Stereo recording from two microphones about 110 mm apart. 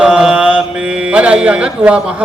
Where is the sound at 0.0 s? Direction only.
5° right (ahead or behind).